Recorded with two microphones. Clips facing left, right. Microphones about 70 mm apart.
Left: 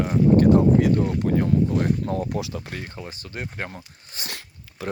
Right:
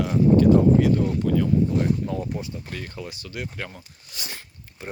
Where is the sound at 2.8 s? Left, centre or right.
Left.